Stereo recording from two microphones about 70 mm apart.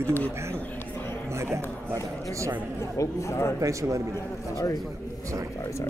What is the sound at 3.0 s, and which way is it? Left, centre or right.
Speech, left.